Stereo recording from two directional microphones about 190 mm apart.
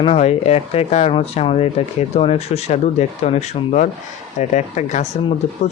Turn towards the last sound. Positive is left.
turn(degrees=35)  # may be behind; listen again after turning